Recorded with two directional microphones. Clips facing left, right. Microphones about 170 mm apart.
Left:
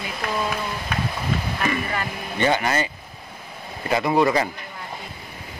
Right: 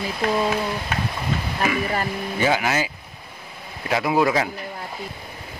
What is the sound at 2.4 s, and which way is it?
Speech, 5° right (ahead or behind).